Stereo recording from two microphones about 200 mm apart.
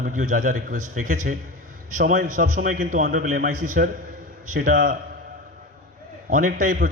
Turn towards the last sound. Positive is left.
turn(degrees=-40)  # may be behind; listen again after turning